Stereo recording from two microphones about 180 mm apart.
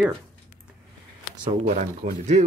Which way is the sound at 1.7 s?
40° right (ahead or behind).